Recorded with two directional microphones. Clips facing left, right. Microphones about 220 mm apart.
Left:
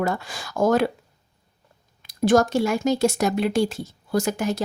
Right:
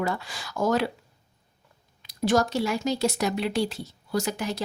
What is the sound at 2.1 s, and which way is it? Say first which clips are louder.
A woman's voice: left 5 dB; 50° left (ahead or behind).